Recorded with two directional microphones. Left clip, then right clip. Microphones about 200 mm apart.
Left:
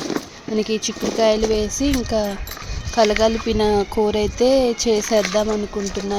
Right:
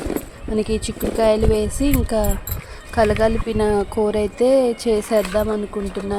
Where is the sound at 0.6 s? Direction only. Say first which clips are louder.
Left 1 dB; 40° right (ahead or behind).